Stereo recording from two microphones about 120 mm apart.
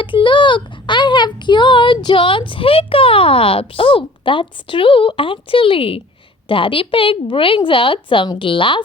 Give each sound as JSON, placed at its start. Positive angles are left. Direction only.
{"t": 0.0, "sound": "a woman's voice", "side_deg": 45}